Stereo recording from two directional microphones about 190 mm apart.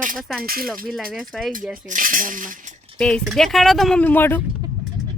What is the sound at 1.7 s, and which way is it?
Speech, 45° right (ahead or behind).